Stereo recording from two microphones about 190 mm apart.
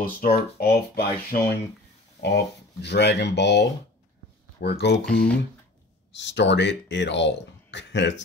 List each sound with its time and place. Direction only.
0.0 s speech: 55° left (ahead or behind)
5.0 s speech: 5° left (ahead or behind)
6.1 s speech: 70° left (ahead or behind)